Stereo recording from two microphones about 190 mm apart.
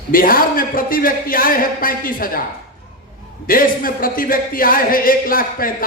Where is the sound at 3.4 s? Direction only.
50° left (ahead or behind).